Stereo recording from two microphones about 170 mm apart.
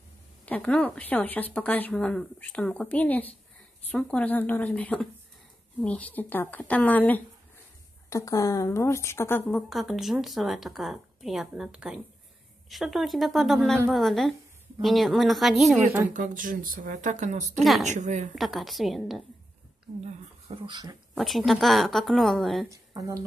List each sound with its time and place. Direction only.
0.5 s speech: 10° left (ahead or behind)
9.5 s speech: centre (ahead or behind)
16.1 s a woman's voice: 50° right (ahead or behind)
18.3 s speech: centre (ahead or behind)
20.0 s speech: 35° right (ahead or behind)
21.1 s speech: centre (ahead or behind)
22.7 s speech: 20° right (ahead or behind)